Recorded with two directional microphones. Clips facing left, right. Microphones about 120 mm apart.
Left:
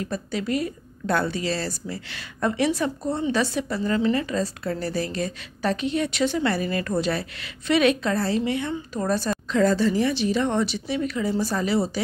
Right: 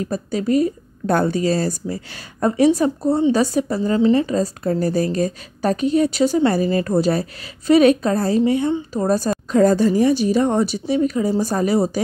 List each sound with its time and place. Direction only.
0.0 s a woman's voice: 40° right (ahead or behind)